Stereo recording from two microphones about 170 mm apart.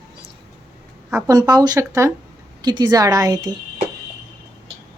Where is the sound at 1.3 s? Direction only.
20° right (ahead or behind).